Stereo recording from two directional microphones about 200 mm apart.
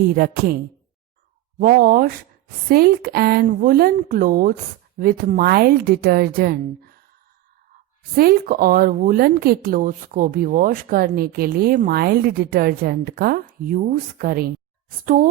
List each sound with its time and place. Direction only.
0.0 s speech: 50° right (ahead or behind)
1.5 s speech: 45° right (ahead or behind)
8.1 s speech: 45° right (ahead or behind)